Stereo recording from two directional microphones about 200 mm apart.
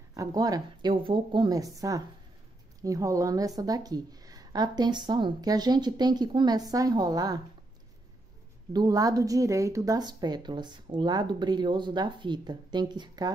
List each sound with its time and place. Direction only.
0.1 s a woman's voice: 15° right (ahead or behind)
8.7 s speech: 20° right (ahead or behind)